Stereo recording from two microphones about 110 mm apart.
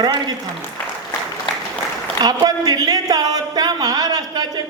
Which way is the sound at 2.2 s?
35° right (ahead or behind).